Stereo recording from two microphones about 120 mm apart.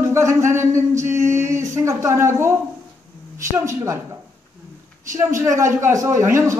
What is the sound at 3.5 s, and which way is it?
Speech, 20° right (ahead or behind).